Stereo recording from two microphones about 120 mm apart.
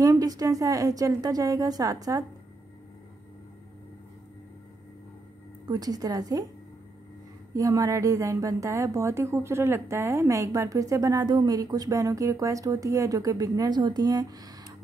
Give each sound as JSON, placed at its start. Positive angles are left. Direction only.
{"t": 0.0, "sound": "a woman's voice", "side_deg": -30}
{"t": 5.7, "sound": "a woman's voice", "side_deg": -30}
{"t": 7.5, "sound": "a woman's voice", "side_deg": -30}